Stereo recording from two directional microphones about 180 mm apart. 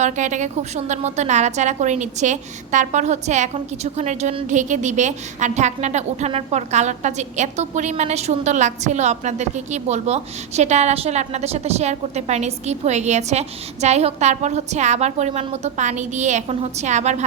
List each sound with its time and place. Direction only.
0.0 s a woman's voice: 40° right (ahead or behind)